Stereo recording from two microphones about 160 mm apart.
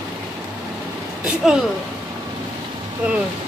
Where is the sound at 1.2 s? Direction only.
5° right (ahead or behind).